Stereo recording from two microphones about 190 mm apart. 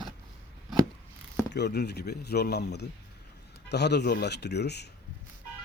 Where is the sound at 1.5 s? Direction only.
65° left (ahead or behind).